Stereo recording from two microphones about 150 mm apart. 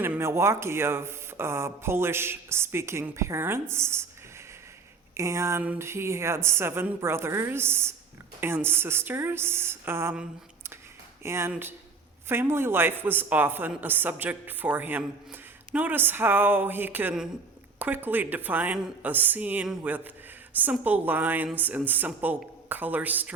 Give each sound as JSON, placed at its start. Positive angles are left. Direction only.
{"t": 0.0, "sound": "speech", "side_deg": -15}
{"t": 5.1, "sound": "speech", "side_deg": -20}